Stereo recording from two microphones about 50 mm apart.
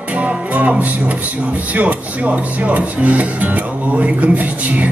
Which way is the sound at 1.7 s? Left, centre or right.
Right.